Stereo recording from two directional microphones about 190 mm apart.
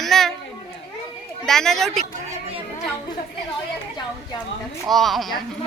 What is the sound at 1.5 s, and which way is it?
Speech, centre (ahead or behind).